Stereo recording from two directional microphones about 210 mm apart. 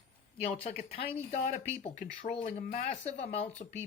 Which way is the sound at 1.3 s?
40° left (ahead or behind).